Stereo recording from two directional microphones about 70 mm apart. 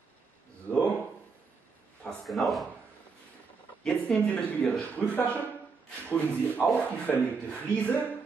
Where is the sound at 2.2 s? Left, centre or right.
Centre.